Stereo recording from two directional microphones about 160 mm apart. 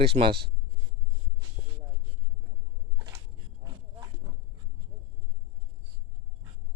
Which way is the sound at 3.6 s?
20° right (ahead or behind).